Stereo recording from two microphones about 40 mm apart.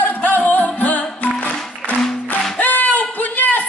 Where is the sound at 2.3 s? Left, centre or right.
Left.